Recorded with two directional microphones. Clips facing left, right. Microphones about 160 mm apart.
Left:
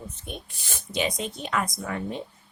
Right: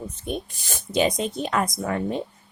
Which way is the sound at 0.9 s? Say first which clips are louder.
Right 6 dB; 40° right (ahead or behind).